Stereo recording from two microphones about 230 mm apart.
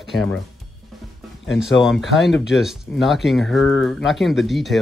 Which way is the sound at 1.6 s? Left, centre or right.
Centre.